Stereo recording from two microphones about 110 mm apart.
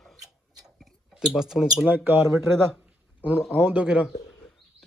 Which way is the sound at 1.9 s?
15° right (ahead or behind).